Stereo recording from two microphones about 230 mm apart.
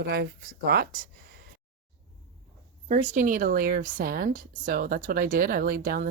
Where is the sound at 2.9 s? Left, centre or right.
Right.